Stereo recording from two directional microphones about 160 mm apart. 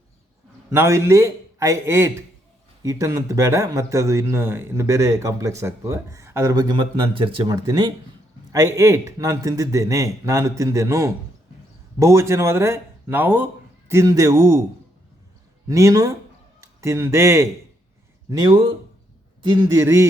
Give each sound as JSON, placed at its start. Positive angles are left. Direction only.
{"t": 0.7, "sound": "a man's voice", "side_deg": -15}
{"t": 15.7, "sound": "a man's voice", "side_deg": -20}
{"t": 19.6, "sound": "speech", "side_deg": -20}